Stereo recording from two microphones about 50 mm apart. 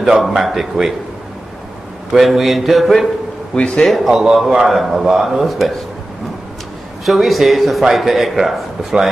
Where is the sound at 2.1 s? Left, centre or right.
Centre.